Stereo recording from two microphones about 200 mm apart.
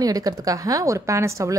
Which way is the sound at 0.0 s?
20° right (ahead or behind).